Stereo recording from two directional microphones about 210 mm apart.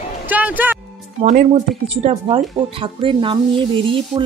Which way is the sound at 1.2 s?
35° right (ahead or behind).